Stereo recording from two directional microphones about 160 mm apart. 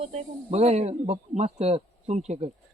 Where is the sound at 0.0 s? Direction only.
40° right (ahead or behind).